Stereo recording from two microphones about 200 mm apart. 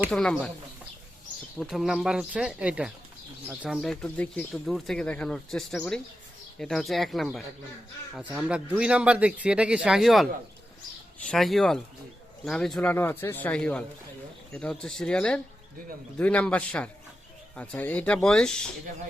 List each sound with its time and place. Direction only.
0.1 s speech: 5° left (ahead or behind)
1.5 s speech: centre (ahead or behind)
11.3 s speech: centre (ahead or behind)